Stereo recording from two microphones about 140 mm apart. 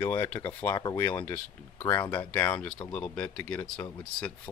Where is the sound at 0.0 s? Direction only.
15° left (ahead or behind).